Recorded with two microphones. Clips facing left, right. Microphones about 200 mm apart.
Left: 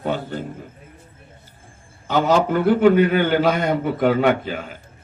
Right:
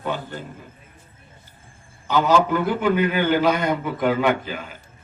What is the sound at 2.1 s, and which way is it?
A man's voice, 50° left (ahead or behind).